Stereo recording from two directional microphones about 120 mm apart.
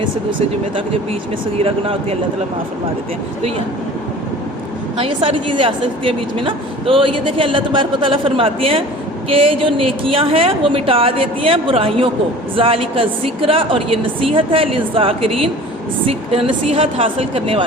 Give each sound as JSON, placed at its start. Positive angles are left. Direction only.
{"t": 1.5, "sound": "a woman's voice", "side_deg": -55}
{"t": 4.9, "sound": "a woman's voice", "side_deg": -45}